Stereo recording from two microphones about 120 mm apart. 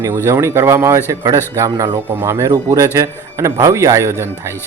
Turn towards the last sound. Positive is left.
turn(degrees=-20)  # may be behind; listen again after turning